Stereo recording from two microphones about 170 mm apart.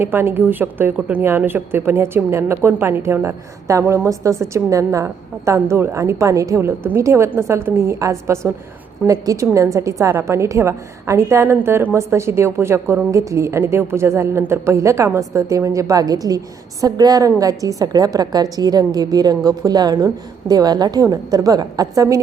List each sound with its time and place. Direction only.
0.0 s a woman's voice: 10° right (ahead or behind)